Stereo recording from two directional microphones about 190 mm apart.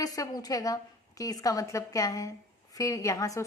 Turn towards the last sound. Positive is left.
turn(degrees=15)  # may be behind; listen again after turning